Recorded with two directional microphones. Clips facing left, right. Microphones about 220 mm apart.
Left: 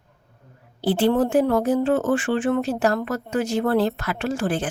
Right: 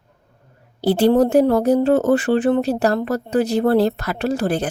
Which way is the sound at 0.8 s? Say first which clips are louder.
Right 5 dB; 40° right (ahead or behind).